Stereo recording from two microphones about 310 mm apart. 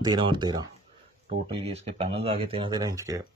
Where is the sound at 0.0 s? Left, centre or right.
Centre.